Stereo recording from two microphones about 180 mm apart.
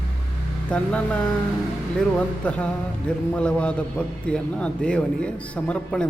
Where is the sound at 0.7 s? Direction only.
5° left (ahead or behind).